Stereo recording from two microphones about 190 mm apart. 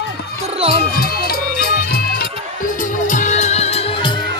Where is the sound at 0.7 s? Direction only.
55° left (ahead or behind); by 4.2 s 25° left (ahead or behind).